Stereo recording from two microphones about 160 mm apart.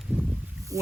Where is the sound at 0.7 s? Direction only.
20° right (ahead or behind).